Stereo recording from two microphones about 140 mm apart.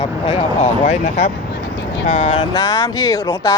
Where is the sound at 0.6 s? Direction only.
60° left (ahead or behind).